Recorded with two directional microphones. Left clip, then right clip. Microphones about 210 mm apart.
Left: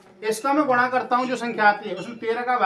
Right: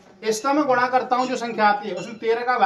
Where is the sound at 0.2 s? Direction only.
20° left (ahead or behind).